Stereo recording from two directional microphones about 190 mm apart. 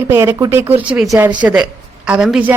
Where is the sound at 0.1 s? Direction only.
10° right (ahead or behind).